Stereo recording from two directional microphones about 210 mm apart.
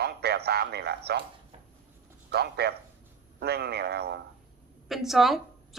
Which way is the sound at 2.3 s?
50° right (ahead or behind).